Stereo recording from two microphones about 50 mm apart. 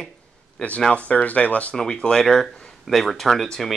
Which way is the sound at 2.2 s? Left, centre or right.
Centre.